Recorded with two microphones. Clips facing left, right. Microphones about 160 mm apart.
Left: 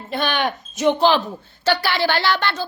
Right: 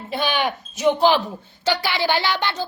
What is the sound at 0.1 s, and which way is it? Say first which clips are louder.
A woman's voice: left 1 dB; 10° right (ahead or behind).